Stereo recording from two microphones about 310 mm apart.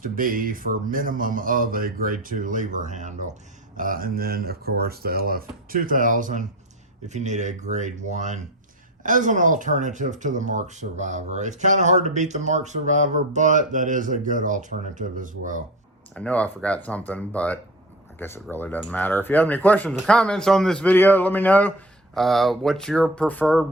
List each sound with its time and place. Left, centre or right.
0.0 s speech: right
16.1 s speech: centre